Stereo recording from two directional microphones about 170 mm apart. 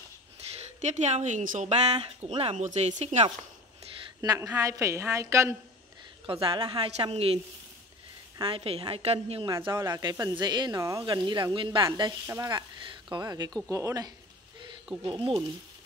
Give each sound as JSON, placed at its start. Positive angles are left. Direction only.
{"t": 0.7, "sound": "speech", "side_deg": -45}
{"t": 4.2, "sound": "a woman's voice", "side_deg": -20}
{"t": 6.2, "sound": "speech", "side_deg": -30}
{"t": 8.4, "sound": "speech", "side_deg": -30}
{"t": 9.7, "sound": "a woman's voice", "side_deg": -15}